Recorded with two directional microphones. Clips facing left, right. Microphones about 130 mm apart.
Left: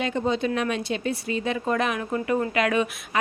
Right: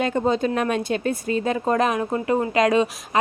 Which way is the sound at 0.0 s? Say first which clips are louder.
Right 4 dB; 45° right (ahead or behind).